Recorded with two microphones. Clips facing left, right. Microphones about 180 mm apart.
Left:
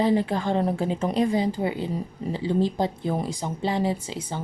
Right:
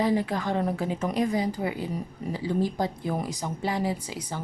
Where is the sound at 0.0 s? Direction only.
25° left (ahead or behind).